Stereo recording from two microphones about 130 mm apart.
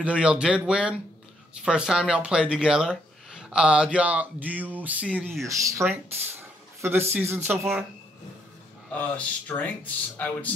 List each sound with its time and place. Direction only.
0.0 s speech: 10° right (ahead or behind)
5.4 s speech: 25° right (ahead or behind)
8.9 s speech: 10° left (ahead or behind)